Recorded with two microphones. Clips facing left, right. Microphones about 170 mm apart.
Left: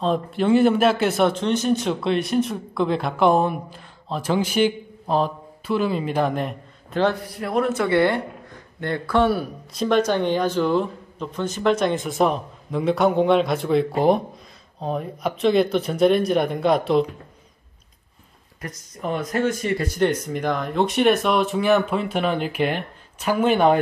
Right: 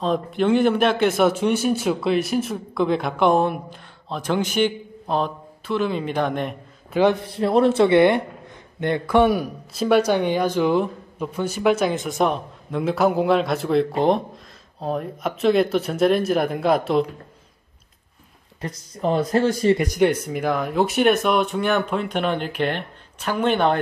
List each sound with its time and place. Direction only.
0.0 s speech: centre (ahead or behind)
6.9 s a man's voice: 10° right (ahead or behind)
7.2 s a man's voice: 30° right (ahead or behind); by 17.0 s centre (ahead or behind)
18.6 s speech: 30° right (ahead or behind)
19.8 s speech: 15° right (ahead or behind); by 23.8 s 5° left (ahead or behind)